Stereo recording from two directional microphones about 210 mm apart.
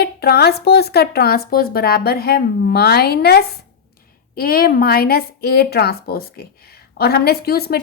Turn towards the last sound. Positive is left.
turn(degrees=50)  # may be behind; listen again after turning